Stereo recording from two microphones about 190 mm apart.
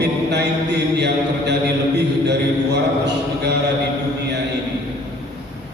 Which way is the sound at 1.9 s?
60° right (ahead or behind).